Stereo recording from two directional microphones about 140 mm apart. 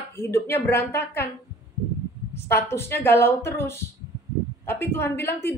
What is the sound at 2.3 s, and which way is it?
A woman's voice, 20° left (ahead or behind).